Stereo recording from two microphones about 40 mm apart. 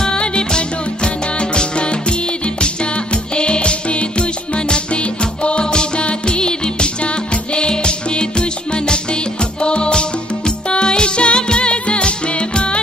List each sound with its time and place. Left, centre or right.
0.0 s music: left